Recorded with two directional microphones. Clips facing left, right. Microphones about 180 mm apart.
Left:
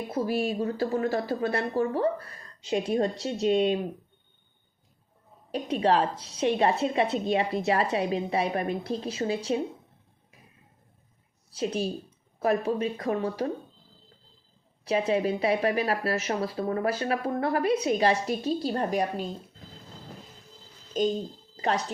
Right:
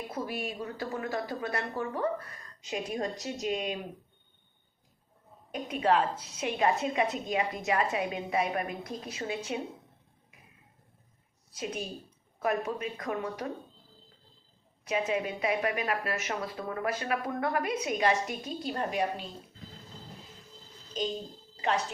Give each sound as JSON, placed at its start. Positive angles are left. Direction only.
{"t": 0.1, "sound": "speech", "side_deg": 30}
{"t": 5.5, "sound": "speech", "side_deg": 35}
{"t": 11.5, "sound": "speech", "side_deg": 30}
{"t": 14.8, "sound": "speech", "side_deg": 35}
{"t": 20.9, "sound": "speech", "side_deg": 50}